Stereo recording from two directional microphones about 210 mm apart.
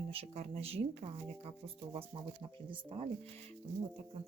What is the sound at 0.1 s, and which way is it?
Speech, 30° right (ahead or behind).